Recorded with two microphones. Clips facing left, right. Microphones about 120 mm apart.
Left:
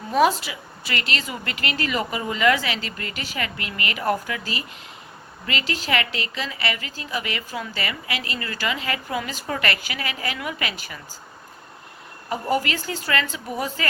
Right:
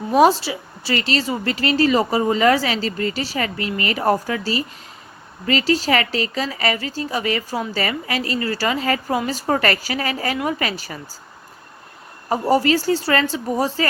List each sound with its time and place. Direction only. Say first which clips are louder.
0.1 s a woman's voice: right 5 dB; 35° right (ahead or behind)
12.3 s a woman's voice: right 7 dB; 35° right (ahead or behind)